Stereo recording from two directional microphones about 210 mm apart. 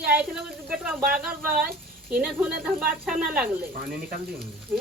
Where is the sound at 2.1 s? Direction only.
5° right (ahead or behind).